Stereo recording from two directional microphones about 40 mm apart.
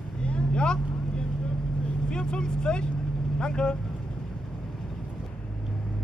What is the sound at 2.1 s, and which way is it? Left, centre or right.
Speech, left.